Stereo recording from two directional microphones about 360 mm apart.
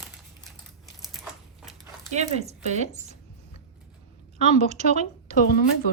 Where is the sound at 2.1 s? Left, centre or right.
Centre.